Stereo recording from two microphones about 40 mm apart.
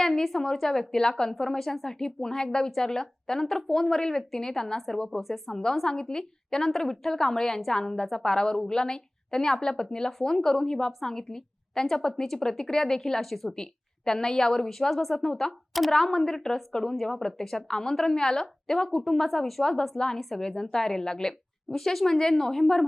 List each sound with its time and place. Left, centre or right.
0.0 s a sound: centre
0.3 s a woman's voice: centre
6.7 s a woman's voice: centre
13.6 s a woman's voice: centre